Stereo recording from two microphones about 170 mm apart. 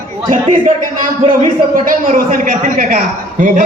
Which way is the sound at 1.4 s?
55° right (ahead or behind).